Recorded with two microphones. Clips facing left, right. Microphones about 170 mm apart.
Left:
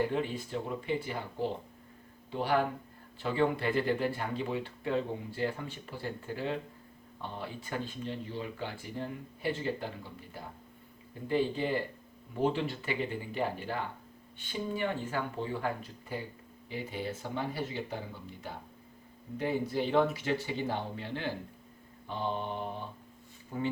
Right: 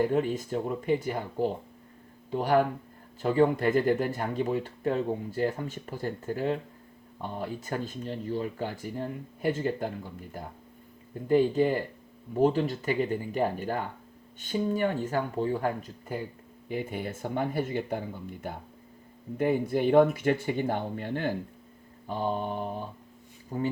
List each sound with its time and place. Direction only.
0.0 s speech: 45° right (ahead or behind)